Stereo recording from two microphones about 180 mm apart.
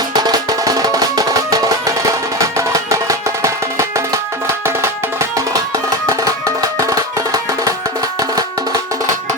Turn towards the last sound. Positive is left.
turn(degrees=-20)  # may be behind; listen again after turning